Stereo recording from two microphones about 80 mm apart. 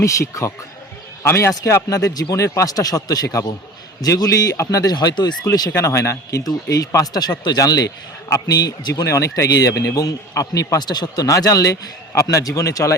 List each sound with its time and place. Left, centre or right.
0.0 s a man's voice: left
5.5 s a man's voice: left